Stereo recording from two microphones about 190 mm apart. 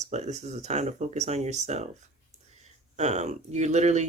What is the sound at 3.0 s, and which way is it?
Speech, 35° right (ahead or behind).